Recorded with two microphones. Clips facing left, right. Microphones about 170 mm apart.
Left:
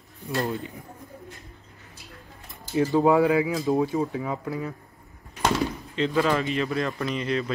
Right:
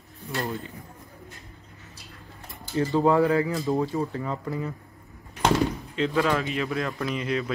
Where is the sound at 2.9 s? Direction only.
15° left (ahead or behind).